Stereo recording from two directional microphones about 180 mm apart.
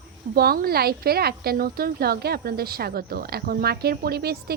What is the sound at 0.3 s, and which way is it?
A woman's voice, 60° right (ahead or behind).